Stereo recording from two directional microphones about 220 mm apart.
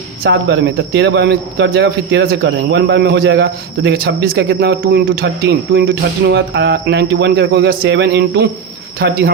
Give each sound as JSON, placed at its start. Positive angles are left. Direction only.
{"t": 0.2, "sound": "speech", "side_deg": -50}